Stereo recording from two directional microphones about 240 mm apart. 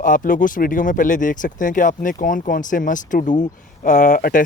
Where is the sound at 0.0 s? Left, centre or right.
Left.